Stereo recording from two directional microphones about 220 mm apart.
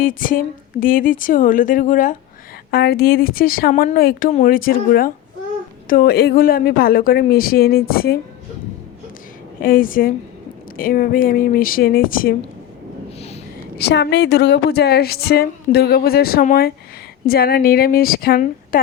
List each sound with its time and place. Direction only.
0.0 s a woman's voice: 40° left (ahead or behind)
9.6 s speech: 40° left (ahead or behind)
13.1 s a sound: 30° left (ahead or behind)
13.7 s a woman's voice: 50° left (ahead or behind)